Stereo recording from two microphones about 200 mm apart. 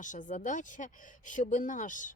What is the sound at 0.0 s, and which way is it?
Speech, 40° left (ahead or behind).